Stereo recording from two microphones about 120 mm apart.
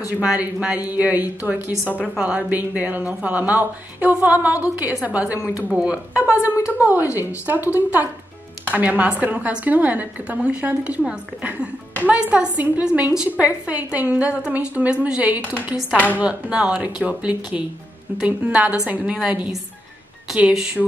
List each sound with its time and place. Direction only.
0.2 s a woman's voice: 10° right (ahead or behind)
6.5 s a woman's voice: 25° left (ahead or behind)
7.2 s a woman's voice: 15° right (ahead or behind)